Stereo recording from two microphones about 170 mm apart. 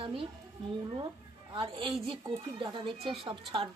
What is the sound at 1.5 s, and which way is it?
Speech, 30° right (ahead or behind).